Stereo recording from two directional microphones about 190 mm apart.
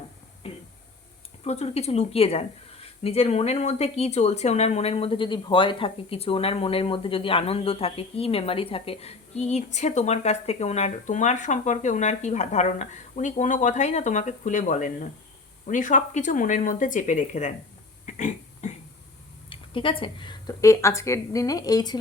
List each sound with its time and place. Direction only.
0.4 s a sound: 30° left (ahead or behind)
1.5 s speech: 35° left (ahead or behind)
18.0 s pig: 40° left (ahead or behind)
19.5 s speech: 25° left (ahead or behind)